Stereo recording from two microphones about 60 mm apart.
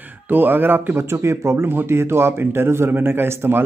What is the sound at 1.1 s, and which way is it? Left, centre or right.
Speech, right.